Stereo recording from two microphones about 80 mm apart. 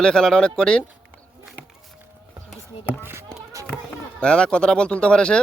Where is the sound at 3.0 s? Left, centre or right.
Right.